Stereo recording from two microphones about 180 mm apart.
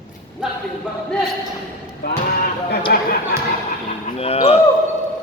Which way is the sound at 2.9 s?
60° left (ahead or behind).